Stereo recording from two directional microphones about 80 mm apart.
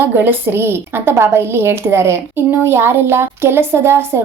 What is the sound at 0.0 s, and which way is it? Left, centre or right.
A woman's voice, right.